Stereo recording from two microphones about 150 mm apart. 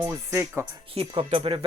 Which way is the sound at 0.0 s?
20° right (ahead or behind).